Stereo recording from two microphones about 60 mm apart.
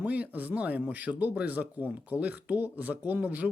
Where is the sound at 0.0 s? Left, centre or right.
Right.